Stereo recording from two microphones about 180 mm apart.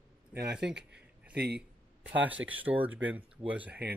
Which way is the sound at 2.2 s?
10° right (ahead or behind).